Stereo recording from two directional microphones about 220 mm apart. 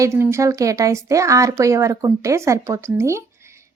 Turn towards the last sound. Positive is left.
turn(degrees=-10)  # may be behind; listen again after turning